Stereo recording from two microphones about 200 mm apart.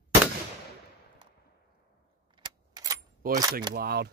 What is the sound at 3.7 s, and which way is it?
Speech, 50° right (ahead or behind).